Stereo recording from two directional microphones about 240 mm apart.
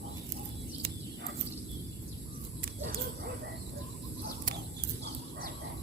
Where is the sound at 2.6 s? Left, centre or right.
Right.